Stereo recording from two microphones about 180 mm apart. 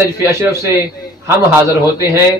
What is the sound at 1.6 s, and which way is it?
Speech, 15° right (ahead or behind).